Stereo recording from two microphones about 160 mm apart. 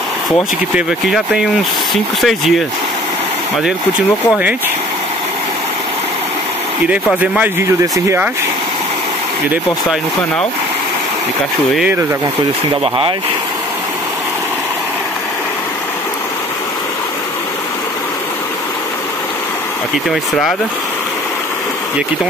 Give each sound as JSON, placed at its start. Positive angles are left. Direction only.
{"t": 0.7, "sound": "speech", "side_deg": 0}
{"t": 7.2, "sound": "speech", "side_deg": -10}
{"t": 12.8, "sound": "speech", "side_deg": -30}
{"t": 20.1, "sound": "speech", "side_deg": 0}